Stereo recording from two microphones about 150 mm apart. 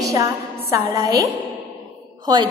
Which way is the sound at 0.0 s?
25° right (ahead or behind).